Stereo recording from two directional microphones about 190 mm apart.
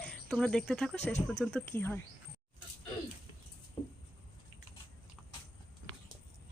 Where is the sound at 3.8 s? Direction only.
30° left (ahead or behind).